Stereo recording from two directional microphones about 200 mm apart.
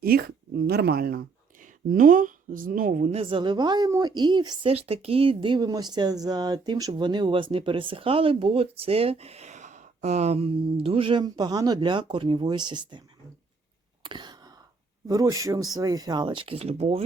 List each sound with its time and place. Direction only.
0.0 s a woman's voice: 50° right (ahead or behind); by 13.0 s 20° right (ahead or behind)
14.0 s a sound: 25° right (ahead or behind)
15.0 s speech: 15° right (ahead or behind)